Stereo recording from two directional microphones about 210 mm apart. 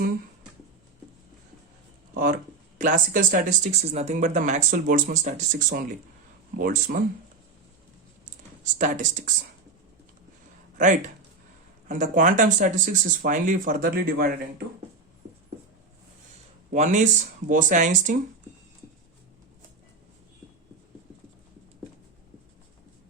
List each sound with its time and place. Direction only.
2.1 s speech: 40° right (ahead or behind)
8.6 s speech: 35° right (ahead or behind)
10.8 s speech: 40° right (ahead or behind)
16.7 s speech: 35° right (ahead or behind)